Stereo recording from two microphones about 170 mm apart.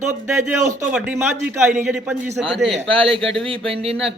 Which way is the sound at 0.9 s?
10° right (ahead or behind).